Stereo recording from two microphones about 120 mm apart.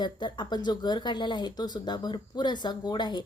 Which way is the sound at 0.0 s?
40° left (ahead or behind).